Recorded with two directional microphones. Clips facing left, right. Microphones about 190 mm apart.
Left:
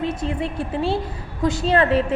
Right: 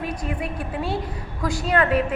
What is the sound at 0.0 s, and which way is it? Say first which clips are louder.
A woman's voice: left 4 dB; 25° left (ahead or behind).